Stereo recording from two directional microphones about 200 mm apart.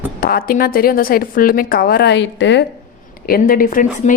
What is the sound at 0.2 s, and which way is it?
A woman's voice, 45° left (ahead or behind).